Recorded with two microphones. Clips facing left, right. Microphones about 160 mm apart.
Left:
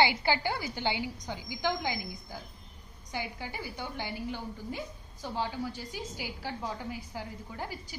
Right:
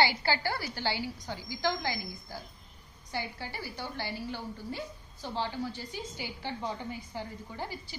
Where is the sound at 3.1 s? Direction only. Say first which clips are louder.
Even; 15° left (ahead or behind).